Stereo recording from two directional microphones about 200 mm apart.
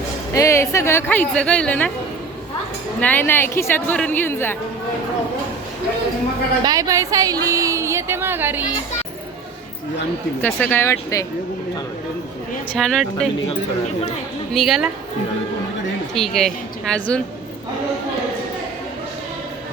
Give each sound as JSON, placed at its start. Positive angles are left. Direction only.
{"t": 0.3, "sound": "a woman's voice", "side_deg": 15}
{"t": 3.0, "sound": "a woman's voice", "side_deg": 10}
{"t": 6.7, "sound": "speech", "side_deg": -15}
{"t": 10.4, "sound": "a woman's voice", "side_deg": 10}
{"t": 12.7, "sound": "a woman's voice", "side_deg": 5}
{"t": 14.5, "sound": "a woman's voice", "side_deg": 0}
{"t": 16.1, "sound": "a woman's voice", "side_deg": 0}